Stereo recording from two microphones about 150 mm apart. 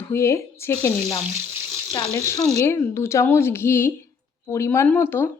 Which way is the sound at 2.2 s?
20° left (ahead or behind).